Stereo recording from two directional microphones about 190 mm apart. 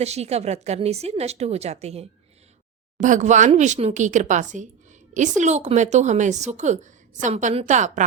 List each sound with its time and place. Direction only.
0.0 s a woman's voice: 35° right (ahead or behind)